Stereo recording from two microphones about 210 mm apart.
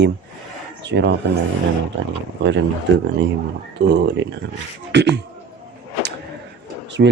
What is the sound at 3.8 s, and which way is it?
Speech, 55° right (ahead or behind).